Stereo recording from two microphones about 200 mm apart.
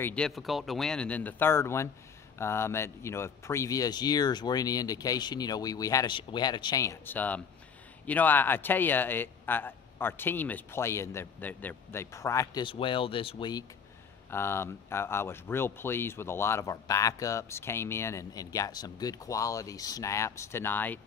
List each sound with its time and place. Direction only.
0.0 s speech: 5° left (ahead or behind)